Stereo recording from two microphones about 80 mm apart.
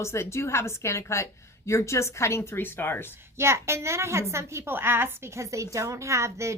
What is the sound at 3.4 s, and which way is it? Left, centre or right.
A woman's voice, right.